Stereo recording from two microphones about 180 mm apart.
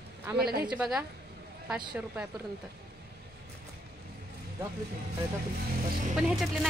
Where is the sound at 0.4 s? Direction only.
60° right (ahead or behind).